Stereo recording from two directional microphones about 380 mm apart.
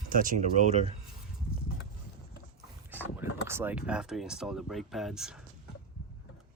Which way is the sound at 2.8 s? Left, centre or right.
Centre.